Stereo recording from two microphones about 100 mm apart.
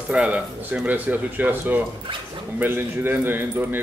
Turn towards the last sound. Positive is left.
turn(degrees=-20)  # may be behind; listen again after turning